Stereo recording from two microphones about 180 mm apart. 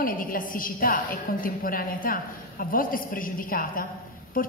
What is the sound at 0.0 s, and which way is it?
A woman's voice, 50° left (ahead or behind).